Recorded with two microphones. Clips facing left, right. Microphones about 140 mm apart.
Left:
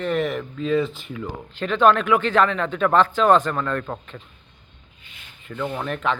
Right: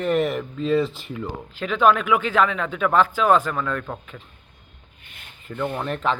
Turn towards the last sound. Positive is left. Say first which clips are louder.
# right 1 dB
turn(degrees=0)  # may be behind; listen again after turning